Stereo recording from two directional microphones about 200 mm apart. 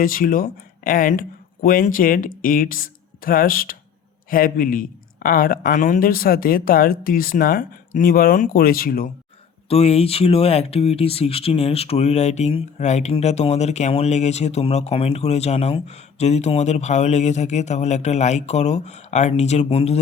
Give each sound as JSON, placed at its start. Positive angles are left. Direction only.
{"t": 0.0, "sound": "speech", "side_deg": 45}
{"t": 9.6, "sound": "speech", "side_deg": 30}